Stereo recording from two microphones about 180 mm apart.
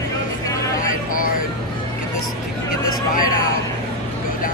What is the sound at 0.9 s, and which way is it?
Vehicle, 50° left (ahead or behind).